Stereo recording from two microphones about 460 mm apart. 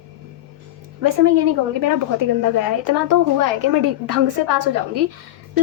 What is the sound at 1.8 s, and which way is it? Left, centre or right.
Speech, right.